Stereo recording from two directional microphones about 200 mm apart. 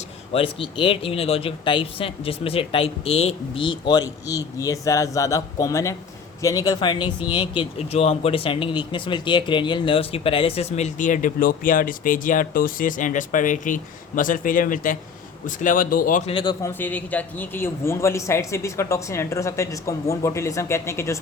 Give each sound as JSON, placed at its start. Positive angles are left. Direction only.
{"t": 0.3, "sound": "speech", "side_deg": 25}
{"t": 16.3, "sound": "speech", "side_deg": 20}
{"t": 16.7, "sound": "a man's voice", "side_deg": 10}